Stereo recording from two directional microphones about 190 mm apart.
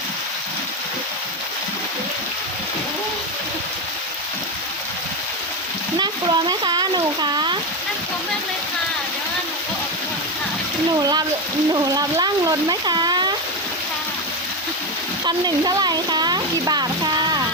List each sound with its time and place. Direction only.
6.0 s a sound: 20° right (ahead or behind)
11.7 s speech: 20° right (ahead or behind)
15.3 s a woman's voice: 20° right (ahead or behind)